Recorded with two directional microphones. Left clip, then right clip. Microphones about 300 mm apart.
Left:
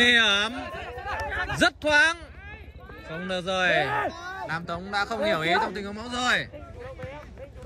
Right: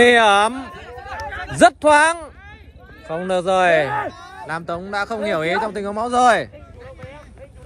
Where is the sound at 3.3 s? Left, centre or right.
Centre.